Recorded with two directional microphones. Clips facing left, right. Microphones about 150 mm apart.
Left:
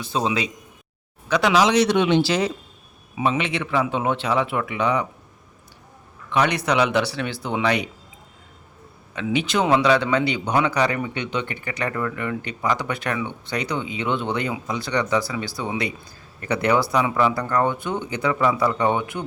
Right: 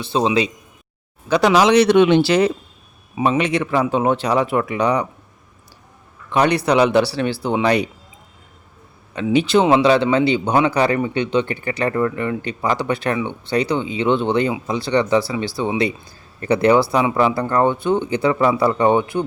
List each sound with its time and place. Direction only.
0.0 s a man's voice: 30° right (ahead or behind)
1.5 s speech: 60° right (ahead or behind)
3.2 s a man's voice: 40° right (ahead or behind)
6.3 s a man's voice: 35° right (ahead or behind)
9.1 s a man's voice: 35° right (ahead or behind)